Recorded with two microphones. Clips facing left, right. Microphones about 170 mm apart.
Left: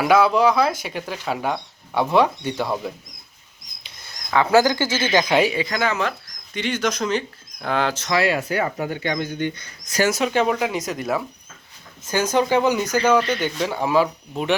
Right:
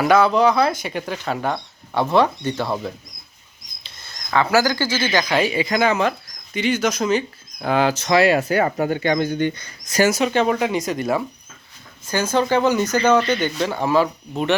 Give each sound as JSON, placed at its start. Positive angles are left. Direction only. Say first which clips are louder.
{"t": 0.0, "sound": "speech", "louder": "right 1 dB", "side_deg": 5}
{"t": 3.8, "sound": "a sound", "louder": "even", "side_deg": 15}
{"t": 4.5, "sound": "speech", "louder": "left 4 dB", "side_deg": 20}
{"t": 5.5, "sound": "speech", "louder": "right 4 dB", "side_deg": -15}
{"t": 8.4, "sound": "speech", "louder": "right 4 dB", "side_deg": -55}
{"t": 10.1, "sound": "speech", "louder": "left 1 dB", "side_deg": 0}
{"t": 12.0, "sound": "speech", "louder": "even", "side_deg": 15}